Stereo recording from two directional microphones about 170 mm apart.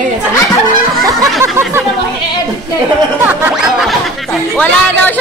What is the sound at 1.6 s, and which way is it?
Speech, 15° right (ahead or behind).